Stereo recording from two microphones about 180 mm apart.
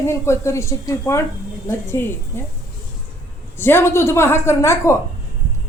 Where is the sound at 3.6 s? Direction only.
15° left (ahead or behind).